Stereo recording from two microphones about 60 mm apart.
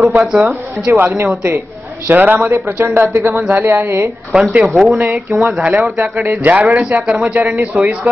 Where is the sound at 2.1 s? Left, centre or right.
Right.